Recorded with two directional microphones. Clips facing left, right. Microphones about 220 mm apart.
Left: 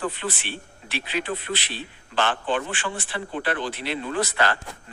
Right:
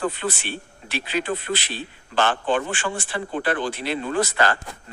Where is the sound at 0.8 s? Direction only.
45° right (ahead or behind).